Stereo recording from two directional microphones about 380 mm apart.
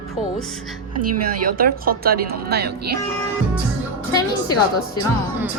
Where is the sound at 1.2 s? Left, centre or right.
Right.